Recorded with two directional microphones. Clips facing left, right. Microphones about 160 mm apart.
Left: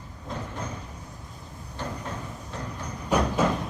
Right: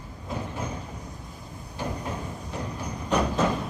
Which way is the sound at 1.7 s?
15° right (ahead or behind).